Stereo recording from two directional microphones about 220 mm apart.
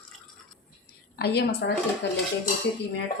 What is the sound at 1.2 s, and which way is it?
Speech, 50° left (ahead or behind).